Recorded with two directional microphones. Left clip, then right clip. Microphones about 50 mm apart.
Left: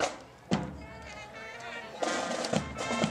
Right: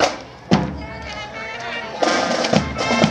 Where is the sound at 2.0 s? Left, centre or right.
Centre.